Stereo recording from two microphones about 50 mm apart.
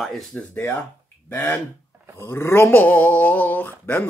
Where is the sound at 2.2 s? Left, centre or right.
Left.